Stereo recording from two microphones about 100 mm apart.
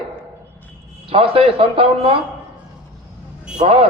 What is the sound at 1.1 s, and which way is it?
A man's voice, 70° right (ahead or behind).